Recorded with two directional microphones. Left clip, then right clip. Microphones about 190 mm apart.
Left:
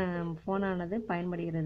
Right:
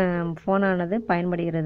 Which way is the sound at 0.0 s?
30° right (ahead or behind).